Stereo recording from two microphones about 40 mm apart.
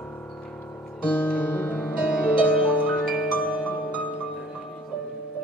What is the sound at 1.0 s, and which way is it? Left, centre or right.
Music, left.